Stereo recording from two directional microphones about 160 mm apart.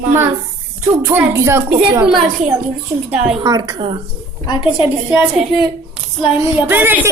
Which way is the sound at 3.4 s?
25° right (ahead or behind).